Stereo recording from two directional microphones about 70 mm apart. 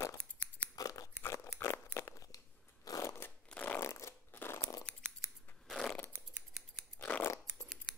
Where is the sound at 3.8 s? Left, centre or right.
Left.